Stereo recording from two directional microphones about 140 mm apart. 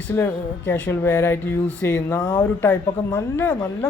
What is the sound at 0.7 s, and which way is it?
Speech, 15° left (ahead or behind).